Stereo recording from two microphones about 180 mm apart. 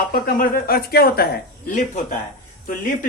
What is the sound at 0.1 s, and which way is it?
Speech, 55° left (ahead or behind).